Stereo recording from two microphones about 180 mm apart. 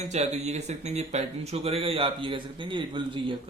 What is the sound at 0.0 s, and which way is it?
Speech, 40° right (ahead or behind).